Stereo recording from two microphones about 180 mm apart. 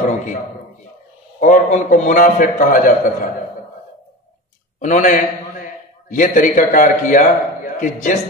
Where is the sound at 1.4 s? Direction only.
45° left (ahead or behind).